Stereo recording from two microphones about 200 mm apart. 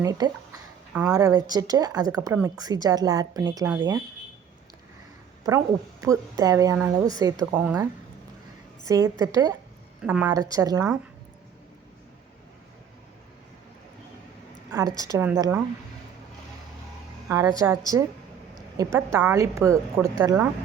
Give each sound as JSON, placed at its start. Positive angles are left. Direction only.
{"t": 0.0, "sound": "a woman's voice", "side_deg": -15}
{"t": 5.4, "sound": "a woman's voice", "side_deg": -15}
{"t": 8.9, "sound": "a woman's voice", "side_deg": -15}
{"t": 10.0, "sound": "a woman's voice", "side_deg": -5}
{"t": 14.7, "sound": "a woman's voice", "side_deg": -15}
{"t": 17.2, "sound": "a woman's voice", "side_deg": -15}